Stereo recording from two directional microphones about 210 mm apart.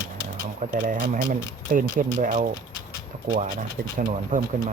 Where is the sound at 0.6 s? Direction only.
40° right (ahead or behind).